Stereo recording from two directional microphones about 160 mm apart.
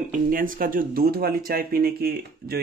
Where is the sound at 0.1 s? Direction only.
60° right (ahead or behind).